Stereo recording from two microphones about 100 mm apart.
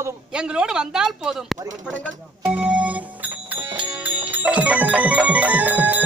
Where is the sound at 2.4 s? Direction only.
10° right (ahead or behind).